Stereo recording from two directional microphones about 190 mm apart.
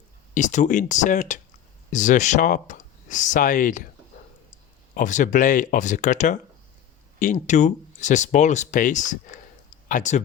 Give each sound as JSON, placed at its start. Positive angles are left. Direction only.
{"t": 0.3, "sound": "speech", "side_deg": 40}
{"t": 4.9, "sound": "speech", "side_deg": 40}